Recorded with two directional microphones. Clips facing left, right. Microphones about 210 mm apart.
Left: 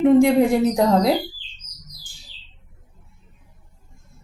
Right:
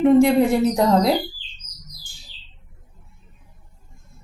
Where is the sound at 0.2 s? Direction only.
15° left (ahead or behind).